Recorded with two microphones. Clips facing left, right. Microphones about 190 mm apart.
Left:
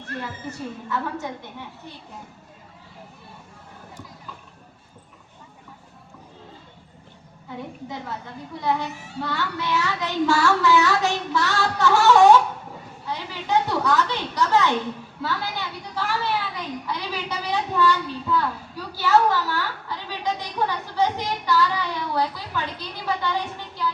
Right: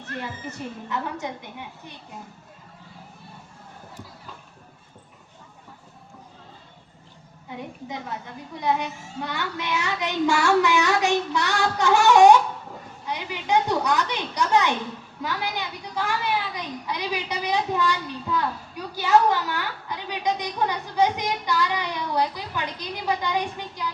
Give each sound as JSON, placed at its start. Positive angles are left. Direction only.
{"t": 0.9, "sound": "a woman's voice", "side_deg": -15}
{"t": 8.7, "sound": "a woman's voice", "side_deg": -15}